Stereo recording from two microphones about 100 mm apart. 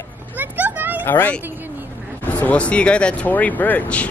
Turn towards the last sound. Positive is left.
turn(degrees=15)  # may be behind; listen again after turning